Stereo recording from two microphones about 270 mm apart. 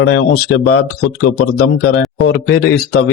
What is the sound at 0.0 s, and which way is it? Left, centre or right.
A man's voice, left.